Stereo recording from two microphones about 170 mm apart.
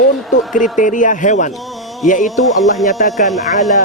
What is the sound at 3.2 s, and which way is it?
Speech, 55° left (ahead or behind).